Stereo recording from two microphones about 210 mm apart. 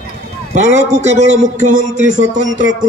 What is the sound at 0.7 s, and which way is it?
Speech, 35° right (ahead or behind).